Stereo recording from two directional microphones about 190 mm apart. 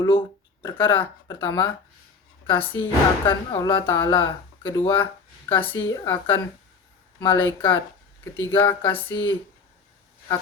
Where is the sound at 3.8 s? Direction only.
10° left (ahead or behind).